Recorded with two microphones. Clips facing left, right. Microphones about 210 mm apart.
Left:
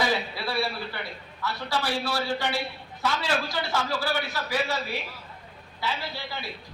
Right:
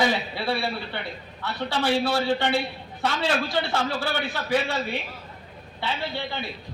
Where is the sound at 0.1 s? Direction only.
30° right (ahead or behind).